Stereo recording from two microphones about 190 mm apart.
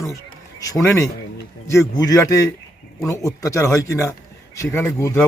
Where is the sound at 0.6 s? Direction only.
20° left (ahead or behind).